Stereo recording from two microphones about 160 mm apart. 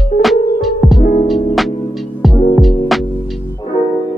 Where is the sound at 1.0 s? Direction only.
60° left (ahead or behind).